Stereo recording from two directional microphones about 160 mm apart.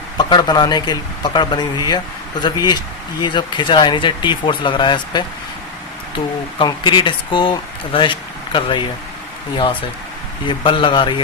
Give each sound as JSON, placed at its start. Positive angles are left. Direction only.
{"t": 0.2, "sound": "speech", "side_deg": 30}
{"t": 10.6, "sound": "speech", "side_deg": 30}